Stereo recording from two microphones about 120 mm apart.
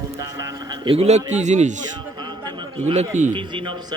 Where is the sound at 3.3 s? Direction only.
45° right (ahead or behind).